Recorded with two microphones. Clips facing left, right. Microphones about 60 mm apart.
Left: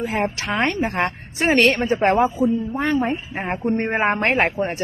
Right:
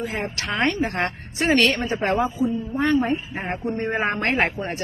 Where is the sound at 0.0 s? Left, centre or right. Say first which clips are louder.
Left 5 dB; centre.